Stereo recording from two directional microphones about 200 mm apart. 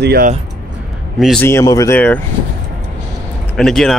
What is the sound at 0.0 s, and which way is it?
Speech, 50° right (ahead or behind).